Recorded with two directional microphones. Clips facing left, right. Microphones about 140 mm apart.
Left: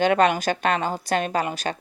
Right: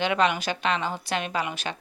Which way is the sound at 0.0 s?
45° left (ahead or behind).